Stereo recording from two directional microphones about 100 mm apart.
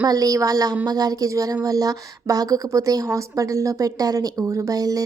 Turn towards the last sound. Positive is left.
turn(degrees=-35)  # may be behind; listen again after turning